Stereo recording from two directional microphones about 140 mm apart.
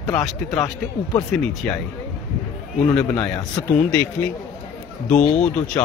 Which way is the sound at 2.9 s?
10° left (ahead or behind).